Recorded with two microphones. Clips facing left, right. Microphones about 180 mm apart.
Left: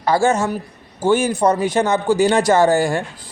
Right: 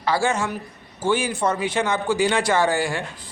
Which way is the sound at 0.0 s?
45° left (ahead or behind).